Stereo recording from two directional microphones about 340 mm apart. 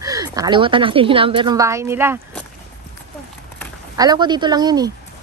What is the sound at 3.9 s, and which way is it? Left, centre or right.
A woman's voice, centre.